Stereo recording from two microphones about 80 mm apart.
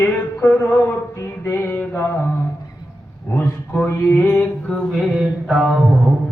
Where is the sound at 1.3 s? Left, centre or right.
Left.